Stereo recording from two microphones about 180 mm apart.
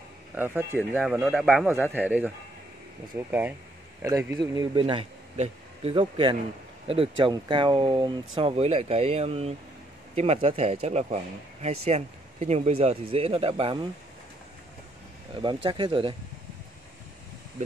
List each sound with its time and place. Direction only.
0.3 s speech: 10° right (ahead or behind)
1.7 s speech: 10° right (ahead or behind); by 13.8 s 30° right (ahead or behind)
15.3 s speech: 25° right (ahead or behind)